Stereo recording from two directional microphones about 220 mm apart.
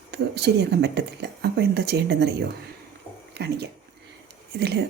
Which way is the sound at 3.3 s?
50° right (ahead or behind).